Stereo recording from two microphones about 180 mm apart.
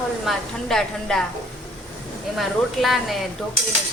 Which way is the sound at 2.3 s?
Centre (ahead or behind).